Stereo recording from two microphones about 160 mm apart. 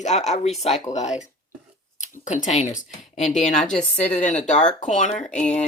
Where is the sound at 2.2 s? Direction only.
50° left (ahead or behind).